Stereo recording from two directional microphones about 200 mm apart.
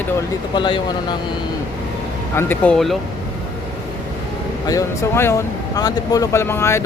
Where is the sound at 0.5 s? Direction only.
25° left (ahead or behind).